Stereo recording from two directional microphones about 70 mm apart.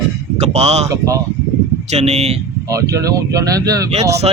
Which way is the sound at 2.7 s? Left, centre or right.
Right.